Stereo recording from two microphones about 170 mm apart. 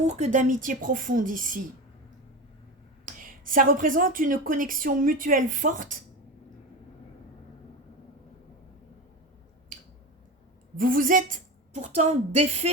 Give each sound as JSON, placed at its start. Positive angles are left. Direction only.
{"t": 0.3, "sound": "a woman's voice", "side_deg": -50}
{"t": 3.1, "sound": "a woman's voice", "side_deg": -55}
{"t": 10.8, "sound": "a woman's voice", "side_deg": -55}